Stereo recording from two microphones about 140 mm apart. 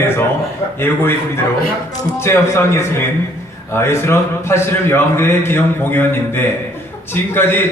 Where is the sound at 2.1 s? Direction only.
20° left (ahead or behind).